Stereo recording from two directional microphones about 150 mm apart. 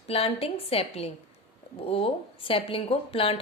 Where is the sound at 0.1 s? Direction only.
40° left (ahead or behind).